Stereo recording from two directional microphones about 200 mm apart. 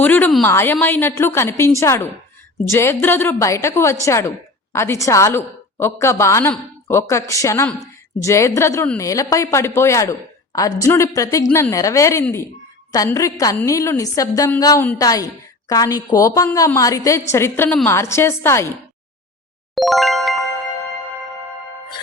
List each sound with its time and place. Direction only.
0.0 s a woman's voice: 10° left (ahead or behind)
19.7 s music: centre (ahead or behind)